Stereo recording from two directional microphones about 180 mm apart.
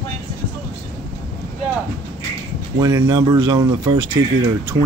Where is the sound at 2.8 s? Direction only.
20° right (ahead or behind).